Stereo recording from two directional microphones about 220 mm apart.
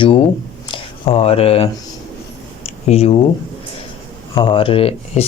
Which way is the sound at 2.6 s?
30° left (ahead or behind).